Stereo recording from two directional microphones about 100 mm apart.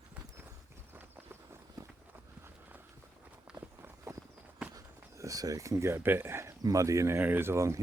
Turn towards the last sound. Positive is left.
turn(degrees=-30)  # may be behind; listen again after turning